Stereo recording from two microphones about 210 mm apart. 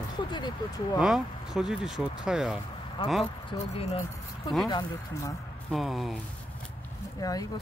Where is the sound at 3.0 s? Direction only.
20° left (ahead or behind).